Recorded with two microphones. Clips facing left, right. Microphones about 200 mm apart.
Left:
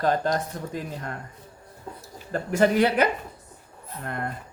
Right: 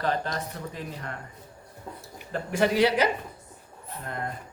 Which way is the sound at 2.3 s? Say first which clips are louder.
Left 3 dB; 45° left (ahead or behind).